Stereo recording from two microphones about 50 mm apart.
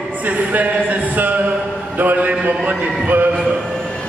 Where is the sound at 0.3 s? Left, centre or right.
Right.